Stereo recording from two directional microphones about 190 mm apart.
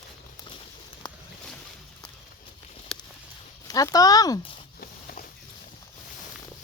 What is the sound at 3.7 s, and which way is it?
Speech, 20° left (ahead or behind).